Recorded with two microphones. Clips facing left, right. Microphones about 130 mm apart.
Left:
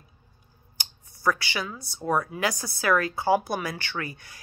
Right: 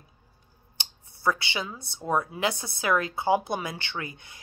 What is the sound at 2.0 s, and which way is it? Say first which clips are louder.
Speech: left 1 dB; 25° right (ahead or behind).